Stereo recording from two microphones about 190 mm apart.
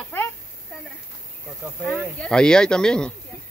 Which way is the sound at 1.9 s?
5° left (ahead or behind).